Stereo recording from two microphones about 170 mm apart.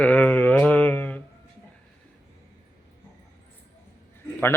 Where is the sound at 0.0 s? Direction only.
10° left (ahead or behind).